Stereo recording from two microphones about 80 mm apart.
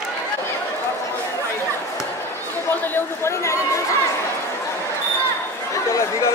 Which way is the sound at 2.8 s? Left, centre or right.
Left.